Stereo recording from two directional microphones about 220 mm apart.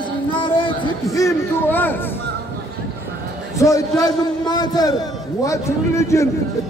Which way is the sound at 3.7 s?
15° left (ahead or behind).